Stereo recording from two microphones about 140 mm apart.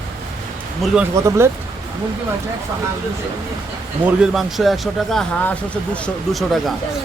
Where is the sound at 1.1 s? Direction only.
20° right (ahead or behind).